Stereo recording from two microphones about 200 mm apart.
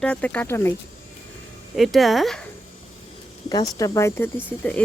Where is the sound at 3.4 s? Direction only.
20° left (ahead or behind).